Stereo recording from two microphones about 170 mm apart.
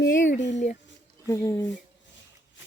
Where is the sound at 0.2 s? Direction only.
45° left (ahead or behind).